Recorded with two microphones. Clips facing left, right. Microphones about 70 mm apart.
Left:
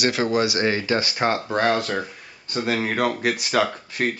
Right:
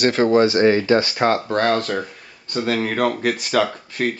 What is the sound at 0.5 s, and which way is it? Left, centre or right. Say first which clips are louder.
Speech: right 7 dB; right.